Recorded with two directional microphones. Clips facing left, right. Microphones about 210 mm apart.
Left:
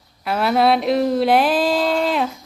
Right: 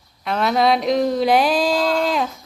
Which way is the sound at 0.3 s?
5° left (ahead or behind).